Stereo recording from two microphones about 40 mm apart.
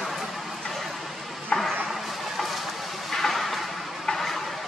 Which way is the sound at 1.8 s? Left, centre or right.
Centre.